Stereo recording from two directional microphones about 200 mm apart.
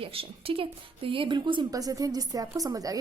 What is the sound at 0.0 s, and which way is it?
A woman's voice, 30° right (ahead or behind).